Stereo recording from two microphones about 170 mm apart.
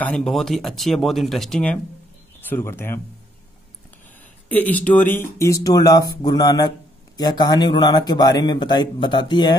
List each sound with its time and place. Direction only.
0.0 s speech: 5° left (ahead or behind)
4.5 s a man's voice: 10° left (ahead or behind); by 9.6 s 25° left (ahead or behind)